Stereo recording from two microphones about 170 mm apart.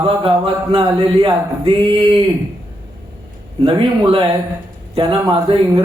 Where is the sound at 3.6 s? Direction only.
30° right (ahead or behind).